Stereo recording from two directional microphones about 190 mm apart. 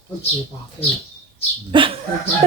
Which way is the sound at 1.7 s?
25° right (ahead or behind).